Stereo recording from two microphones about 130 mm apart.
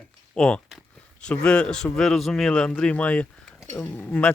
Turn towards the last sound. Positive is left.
turn(degrees=10)  # may be behind; listen again after turning